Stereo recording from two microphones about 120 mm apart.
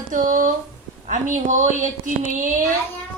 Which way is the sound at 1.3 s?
90° right.